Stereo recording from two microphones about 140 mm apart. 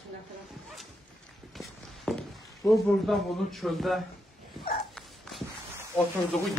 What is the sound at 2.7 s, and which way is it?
Speech, centre (ahead or behind).